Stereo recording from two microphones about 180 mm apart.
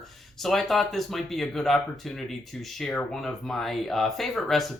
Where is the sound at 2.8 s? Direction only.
5° left (ahead or behind).